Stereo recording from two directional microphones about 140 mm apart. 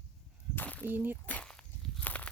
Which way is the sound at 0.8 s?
15° right (ahead or behind).